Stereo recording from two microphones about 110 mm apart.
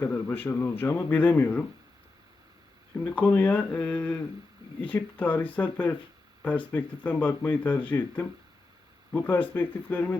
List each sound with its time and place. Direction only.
0.0 s speech: 15° left (ahead or behind)
3.2 s speech: 15° left (ahead or behind)